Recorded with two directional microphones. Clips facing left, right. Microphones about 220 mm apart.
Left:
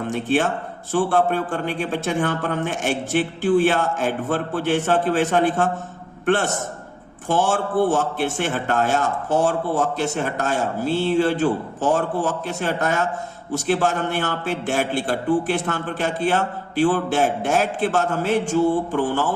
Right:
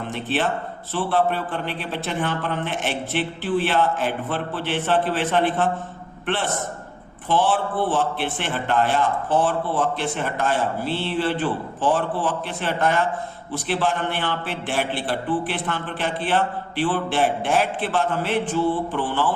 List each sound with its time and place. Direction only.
0.0 s a man's voice: 45° left (ahead or behind)